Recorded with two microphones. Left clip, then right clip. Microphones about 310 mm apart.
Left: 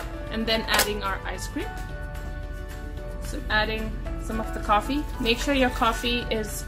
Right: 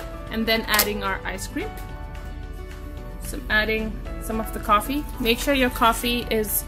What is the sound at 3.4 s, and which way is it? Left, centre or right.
A woman's voice, right.